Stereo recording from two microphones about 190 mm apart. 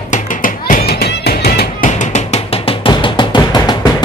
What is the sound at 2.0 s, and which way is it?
Music, 35° left (ahead or behind).